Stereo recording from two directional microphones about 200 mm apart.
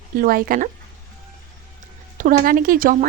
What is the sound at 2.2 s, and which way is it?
Speech, 45° right (ahead or behind).